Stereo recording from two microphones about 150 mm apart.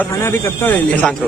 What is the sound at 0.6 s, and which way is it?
Speech, 10° left (ahead or behind).